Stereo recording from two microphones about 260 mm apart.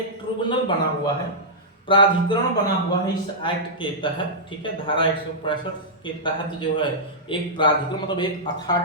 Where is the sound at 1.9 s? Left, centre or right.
Centre.